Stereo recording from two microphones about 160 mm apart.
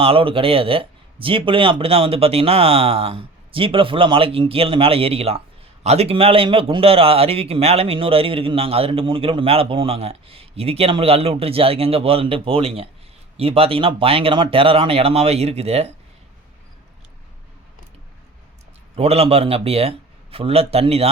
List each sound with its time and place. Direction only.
0.0 s speech: 35° right (ahead or behind)
18.9 s speech: 40° right (ahead or behind)